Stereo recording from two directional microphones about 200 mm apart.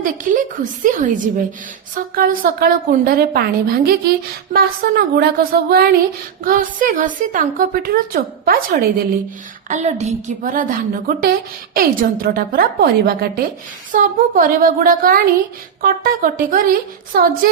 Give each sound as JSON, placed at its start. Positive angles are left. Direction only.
{"t": 0.0, "sound": "a woman's voice", "side_deg": -40}
{"t": 9.6, "sound": "a woman's voice", "side_deg": -35}